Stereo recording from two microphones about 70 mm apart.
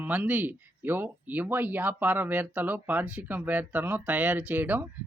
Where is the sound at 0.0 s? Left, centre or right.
Right.